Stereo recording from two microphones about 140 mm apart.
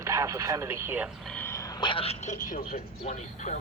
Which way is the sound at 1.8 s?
40° left (ahead or behind).